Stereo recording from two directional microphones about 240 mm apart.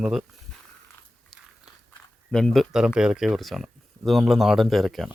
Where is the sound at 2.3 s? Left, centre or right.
Centre.